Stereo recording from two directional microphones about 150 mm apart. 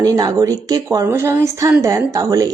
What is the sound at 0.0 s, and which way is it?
A woman's voice, 25° right (ahead or behind).